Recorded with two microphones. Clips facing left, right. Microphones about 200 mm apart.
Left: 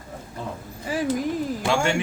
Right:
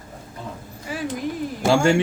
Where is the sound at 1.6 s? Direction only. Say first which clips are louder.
Right 7 dB; 35° right (ahead or behind).